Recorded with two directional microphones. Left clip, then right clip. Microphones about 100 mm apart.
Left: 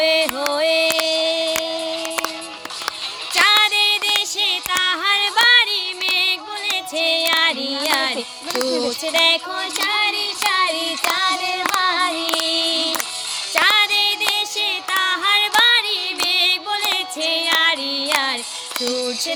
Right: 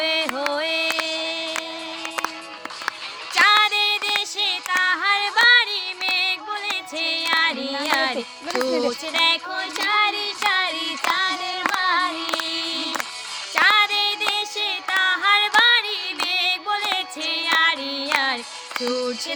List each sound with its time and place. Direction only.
0.0 s a sound: 15° right (ahead or behind)
1.0 s a sound: 40° left (ahead or behind)
3.3 s music: 10° right (ahead or behind)
10.1 s child singing: 40° left (ahead or behind)
10.4 s child singing: 20° right (ahead or behind)
11.3 s clapping: 40° left (ahead or behind)
11.6 s female singing: 20° right (ahead or behind)
12.4 s female singing: 40° left (ahead or behind)
13.5 s a sound: 10° right (ahead or behind)
17.8 s music: 40° left (ahead or behind)
18.1 s female singing: 15° right (ahead or behind)